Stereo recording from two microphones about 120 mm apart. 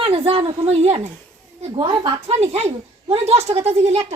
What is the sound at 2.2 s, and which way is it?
A woman's voice, 60° right (ahead or behind).